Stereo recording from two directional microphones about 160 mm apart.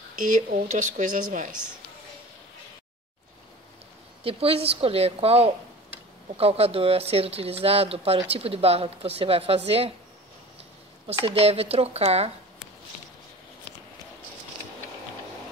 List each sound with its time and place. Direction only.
0.2 s speech: 55° right (ahead or behind)
4.2 s speech: 35° right (ahead or behind)
11.1 s speech: 35° right (ahead or behind)